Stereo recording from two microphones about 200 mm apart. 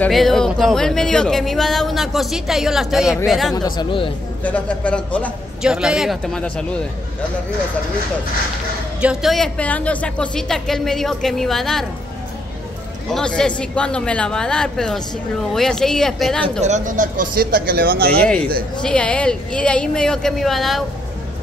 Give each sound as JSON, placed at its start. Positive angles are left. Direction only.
{"t": 0.0, "sound": "speech", "side_deg": 0}
{"t": 3.5, "sound": "speech", "side_deg": 20}
{"t": 4.4, "sound": "a man's voice", "side_deg": 10}
{"t": 9.0, "sound": "speech", "side_deg": 0}
{"t": 13.1, "sound": "speech", "side_deg": 5}
{"t": 16.6, "sound": "speech", "side_deg": -40}
{"t": 18.2, "sound": "speech", "side_deg": 5}